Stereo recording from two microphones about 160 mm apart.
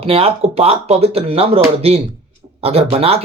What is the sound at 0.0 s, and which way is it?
Speech, 35° right (ahead or behind).